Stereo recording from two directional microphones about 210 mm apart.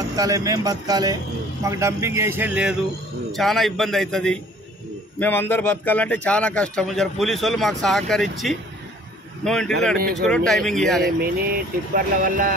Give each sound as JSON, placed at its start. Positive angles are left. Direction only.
{"t": 0.1, "sound": "a man's voice", "side_deg": -15}
{"t": 11.1, "sound": "speech", "side_deg": -45}